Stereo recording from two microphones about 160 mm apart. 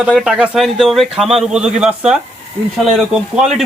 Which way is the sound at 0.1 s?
5° right (ahead or behind).